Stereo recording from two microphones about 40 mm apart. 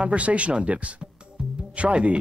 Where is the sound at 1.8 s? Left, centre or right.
Right.